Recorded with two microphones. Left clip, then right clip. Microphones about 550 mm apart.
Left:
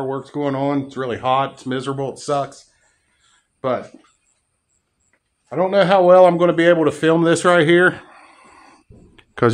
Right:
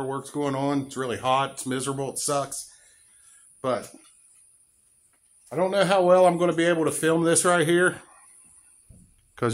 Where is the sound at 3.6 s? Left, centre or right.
Right.